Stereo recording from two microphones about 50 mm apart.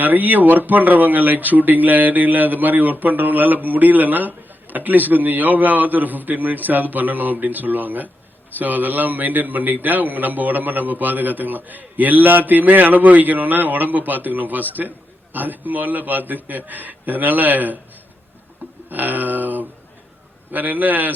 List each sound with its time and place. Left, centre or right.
0.0 s a man's voice: right
18.9 s a man's voice: right